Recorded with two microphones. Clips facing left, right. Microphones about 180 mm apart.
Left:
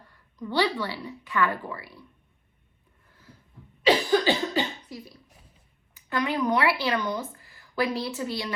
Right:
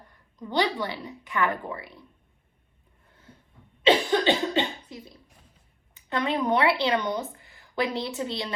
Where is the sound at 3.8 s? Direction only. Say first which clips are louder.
Even; 25° right (ahead or behind).